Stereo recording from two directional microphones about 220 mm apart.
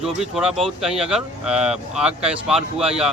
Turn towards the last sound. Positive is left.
turn(degrees=-5)  # may be behind; listen again after turning